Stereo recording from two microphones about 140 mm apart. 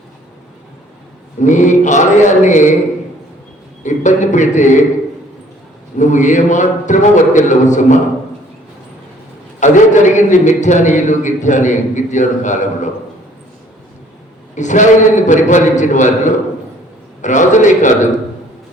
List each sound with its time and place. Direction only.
1.4 s a man's voice: 60° left (ahead or behind)
3.8 s a man's voice: 60° left (ahead or behind)
6.0 s a man's voice: 60° left (ahead or behind)
9.6 s a man's voice: 60° left (ahead or behind)
14.5 s a man's voice: 60° left (ahead or behind)